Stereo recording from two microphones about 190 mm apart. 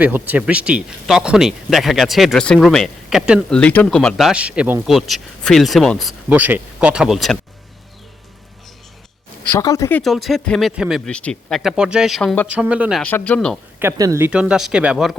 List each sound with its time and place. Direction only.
0.0 s speech: 10° right (ahead or behind)
3.6 s speech: 5° left (ahead or behind)
9.5 s speech: 15° left (ahead or behind)
10.0 s speech: centre (ahead or behind)
12.5 s speech: 5° right (ahead or behind)
13.0 s speech: 10° left (ahead or behind)
13.7 s speech: 15° right (ahead or behind)